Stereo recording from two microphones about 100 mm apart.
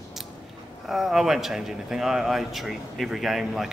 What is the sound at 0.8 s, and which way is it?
Speech, 5° right (ahead or behind).